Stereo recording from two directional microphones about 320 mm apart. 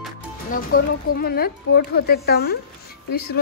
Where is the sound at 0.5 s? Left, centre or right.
Left.